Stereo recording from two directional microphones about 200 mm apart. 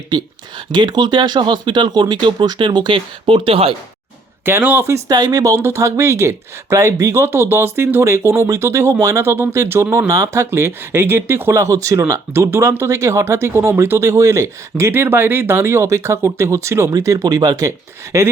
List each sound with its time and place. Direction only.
0.7 s speech: 20° right (ahead or behind)
4.4 s speech: 10° right (ahead or behind)